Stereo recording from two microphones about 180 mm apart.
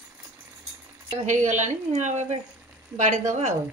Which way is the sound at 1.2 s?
40° right (ahead or behind).